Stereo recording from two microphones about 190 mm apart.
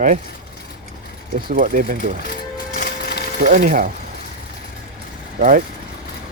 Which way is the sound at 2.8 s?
55° left (ahead or behind).